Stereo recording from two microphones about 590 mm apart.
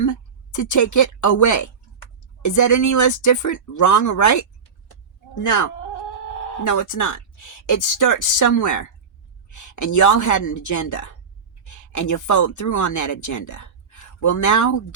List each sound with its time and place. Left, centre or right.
0.0 s a woman's voice: left
6.7 s speech: left